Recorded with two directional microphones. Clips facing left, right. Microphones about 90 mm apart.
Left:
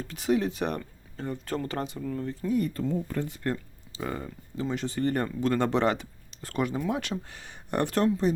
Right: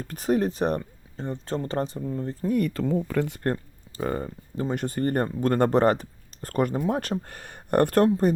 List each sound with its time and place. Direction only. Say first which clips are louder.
0.0 s speech: right 2 dB; 45° right (ahead or behind)
2.0 s speech: right 2 dB; 25° right (ahead or behind)
2.5 s speech: right 3 dB; 70° right (ahead or behind)
3.4 s speech: right 4 dB; 45° right (ahead or behind)